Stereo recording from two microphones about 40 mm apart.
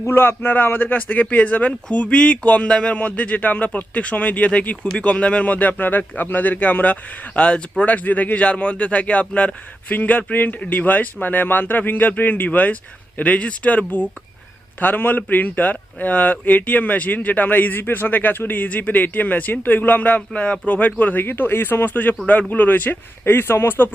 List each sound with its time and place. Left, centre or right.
0.1 s speech: left
0.5 s speech: left
2.6 s speech: centre
2.9 s speech: left
5.5 s speech: left
7.9 s speech: left
8.4 s speech: left
14.8 s speech: left
20.0 s speech: left
21.2 s speech: left
23.2 s speech: left